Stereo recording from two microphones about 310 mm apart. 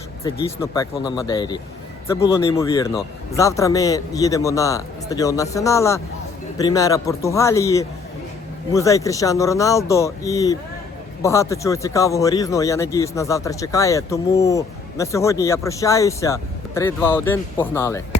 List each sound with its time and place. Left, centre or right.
0.3 s speech: centre